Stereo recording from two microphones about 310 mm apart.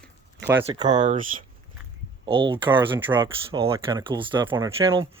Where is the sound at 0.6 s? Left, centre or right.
Centre.